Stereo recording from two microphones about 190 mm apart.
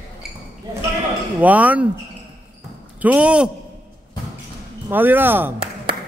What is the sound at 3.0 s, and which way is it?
Speech, 5° right (ahead or behind).